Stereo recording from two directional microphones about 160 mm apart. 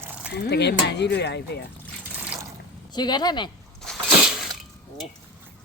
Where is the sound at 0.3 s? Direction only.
90° left.